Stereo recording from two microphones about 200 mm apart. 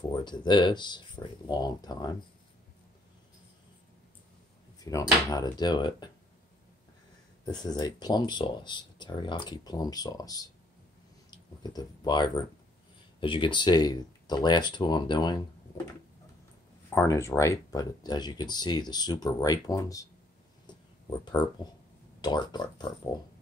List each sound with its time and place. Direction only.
0.1 s speech: 20° left (ahead or behind)
4.7 s a sound: 15° left (ahead or behind)
5.3 s speech: 20° left (ahead or behind)
7.4 s speech: 20° left (ahead or behind)
16.9 s speech: 15° left (ahead or behind)
20.6 s a sound: 20° left (ahead or behind)
22.2 s speech: 20° left (ahead or behind)